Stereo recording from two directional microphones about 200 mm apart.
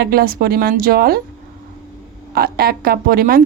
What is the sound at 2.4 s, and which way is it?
Speech, 50° right (ahead or behind).